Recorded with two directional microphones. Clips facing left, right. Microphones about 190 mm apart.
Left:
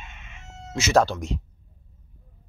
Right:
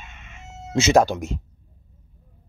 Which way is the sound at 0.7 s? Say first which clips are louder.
Right 4 dB; 25° right (ahead or behind).